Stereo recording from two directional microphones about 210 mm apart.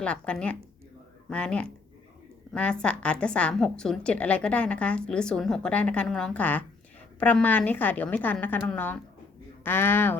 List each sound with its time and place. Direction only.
0.0 s a woman's voice: 5° left (ahead or behind)